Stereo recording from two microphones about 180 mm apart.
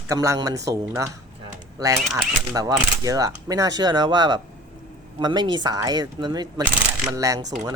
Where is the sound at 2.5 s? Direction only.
20° right (ahead or behind).